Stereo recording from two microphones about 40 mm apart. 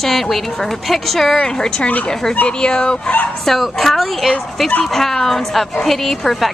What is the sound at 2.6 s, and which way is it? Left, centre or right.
Speech, left.